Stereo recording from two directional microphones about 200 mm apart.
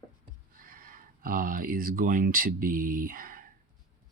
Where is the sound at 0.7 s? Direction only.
45° right (ahead or behind).